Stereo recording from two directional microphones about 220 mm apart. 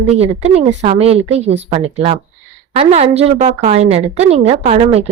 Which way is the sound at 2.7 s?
30° right (ahead or behind).